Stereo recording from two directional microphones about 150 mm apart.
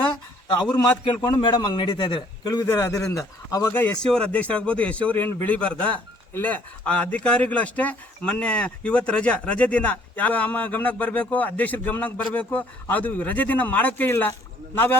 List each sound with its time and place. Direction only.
0.4 s a man's voice: 25° left (ahead or behind)
3.7 s a man's voice: 10° left (ahead or behind)